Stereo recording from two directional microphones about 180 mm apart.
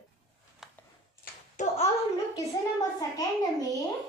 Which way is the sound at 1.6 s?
40° left (ahead or behind).